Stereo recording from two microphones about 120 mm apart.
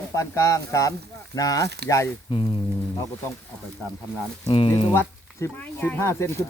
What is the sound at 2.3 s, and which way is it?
Speech, 50° left (ahead or behind).